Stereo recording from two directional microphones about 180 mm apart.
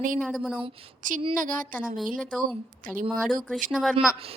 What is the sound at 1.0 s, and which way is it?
Speech, 45° right (ahead or behind).